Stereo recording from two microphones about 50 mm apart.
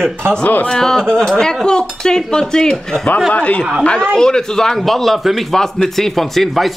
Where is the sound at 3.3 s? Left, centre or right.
Left.